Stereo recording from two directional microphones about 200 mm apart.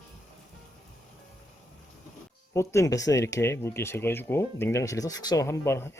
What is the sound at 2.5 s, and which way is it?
Speech, 15° left (ahead or behind).